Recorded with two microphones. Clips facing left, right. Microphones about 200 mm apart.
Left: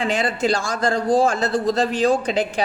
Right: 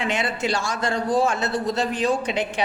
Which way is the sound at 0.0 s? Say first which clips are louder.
Left 4 dB; 35° left (ahead or behind).